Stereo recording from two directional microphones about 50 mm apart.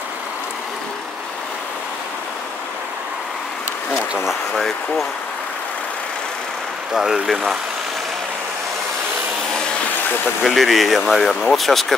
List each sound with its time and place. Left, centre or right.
3.9 s bee: centre
4.3 s speech: centre
6.9 s speech: centre
10.4 s speech: centre